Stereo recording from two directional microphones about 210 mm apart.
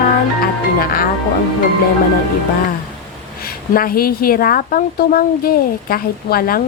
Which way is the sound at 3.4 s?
45° left (ahead or behind).